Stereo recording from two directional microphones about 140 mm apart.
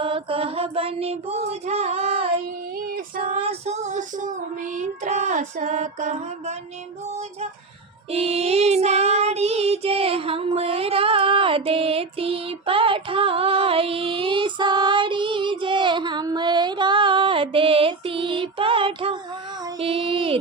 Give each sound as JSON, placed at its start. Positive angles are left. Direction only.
{"t": 0.0, "sound": "female singing", "side_deg": -40}
{"t": 3.4, "sound": "child singing", "side_deg": -50}
{"t": 8.1, "sound": "child singing", "side_deg": -45}